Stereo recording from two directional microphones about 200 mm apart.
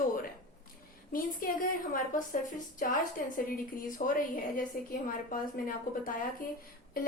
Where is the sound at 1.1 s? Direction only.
45° left (ahead or behind).